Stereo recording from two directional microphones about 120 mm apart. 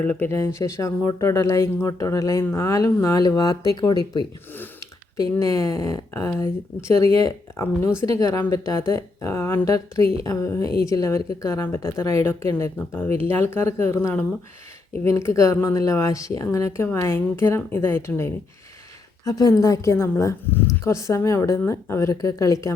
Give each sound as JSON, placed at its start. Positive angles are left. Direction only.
{"t": 0.0, "sound": "speech", "side_deg": 15}
{"t": 5.1, "sound": "speech", "side_deg": 25}